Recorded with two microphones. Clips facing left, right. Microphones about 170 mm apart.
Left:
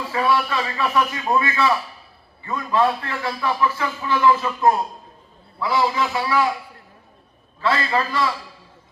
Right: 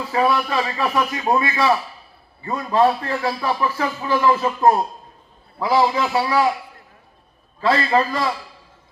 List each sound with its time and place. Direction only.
0.1 s a man's voice: 35° right (ahead or behind)
7.6 s a man's voice: 35° right (ahead or behind)